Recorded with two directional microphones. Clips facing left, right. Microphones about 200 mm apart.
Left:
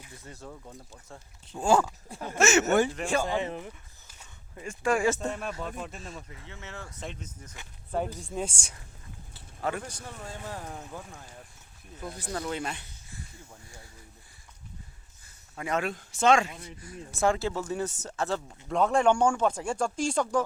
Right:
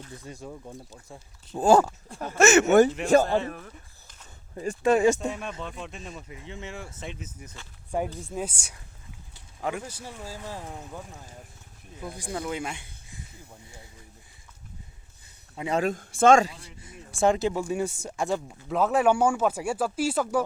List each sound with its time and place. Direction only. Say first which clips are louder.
0.3 s speech: right 3 dB; 15° right (ahead or behind)
1.5 s speech: right 5 dB; 40° right (ahead or behind)
2.4 s speech: right 5 dB; 55° right (ahead or behind)
3.2 s speech: right 3 dB; 15° left (ahead or behind)
4.5 s speech: right 8 dB; 35° right (ahead or behind)
4.8 s speech: right 5 dB; 20° right (ahead or behind)
5.2 s speech: right 1 dB; centre (ahead or behind)
6.2 s speech: right 6 dB; 15° right (ahead or behind)
15.5 s speech: right 3 dB; 25° right (ahead or behind)
15.8 s speech: right 7 dB; 45° right (ahead or behind)
16.6 s speech: left 4 dB; 25° right (ahead or behind); by 20.4 s 5° right (ahead or behind)